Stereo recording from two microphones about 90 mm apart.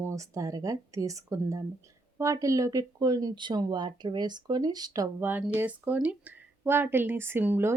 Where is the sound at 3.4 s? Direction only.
55° right (ahead or behind).